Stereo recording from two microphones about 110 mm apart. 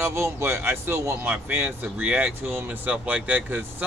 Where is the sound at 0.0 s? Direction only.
25° right (ahead or behind).